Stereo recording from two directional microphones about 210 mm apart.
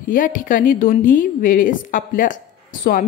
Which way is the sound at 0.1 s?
40° left (ahead or behind).